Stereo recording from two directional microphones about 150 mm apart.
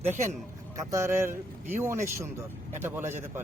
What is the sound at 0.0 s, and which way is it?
Speech, 15° right (ahead or behind).